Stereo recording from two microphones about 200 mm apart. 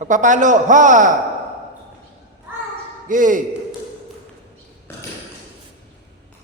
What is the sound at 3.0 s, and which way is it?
Speech, 40° right (ahead or behind).